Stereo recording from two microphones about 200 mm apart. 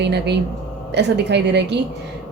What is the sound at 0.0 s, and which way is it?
A woman's voice, 60° right (ahead or behind).